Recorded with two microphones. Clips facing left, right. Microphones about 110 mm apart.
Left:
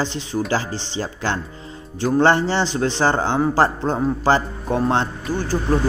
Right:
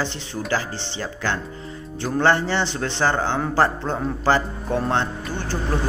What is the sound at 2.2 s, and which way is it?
A man's voice, 20° left (ahead or behind).